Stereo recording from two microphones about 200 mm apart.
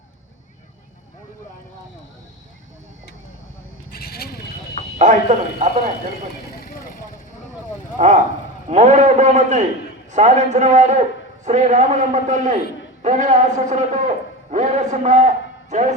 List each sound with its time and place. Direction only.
3.9 s vehicle: 50° left (ahead or behind)
4.9 s a man's voice: 35° right (ahead or behind)
6.5 s vehicle: 50° left (ahead or behind)
7.9 s a man's voice: 35° right (ahead or behind)